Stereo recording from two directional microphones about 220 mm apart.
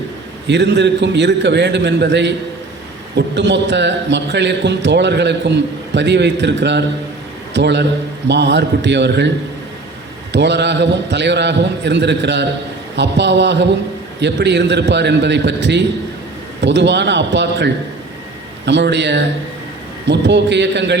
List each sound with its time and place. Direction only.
0.4 s a man's voice: 50° right (ahead or behind)
10.3 s a man's voice: 50° right (ahead or behind)